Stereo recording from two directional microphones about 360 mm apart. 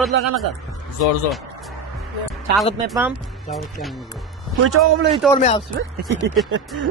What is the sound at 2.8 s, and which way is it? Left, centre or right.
Speech, centre.